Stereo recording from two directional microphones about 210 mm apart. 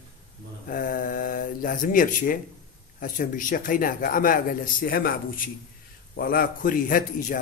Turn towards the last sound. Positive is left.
turn(degrees=40)  # may be behind; listen again after turning